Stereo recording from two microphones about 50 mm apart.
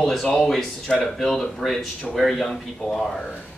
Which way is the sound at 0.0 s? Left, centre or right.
Centre.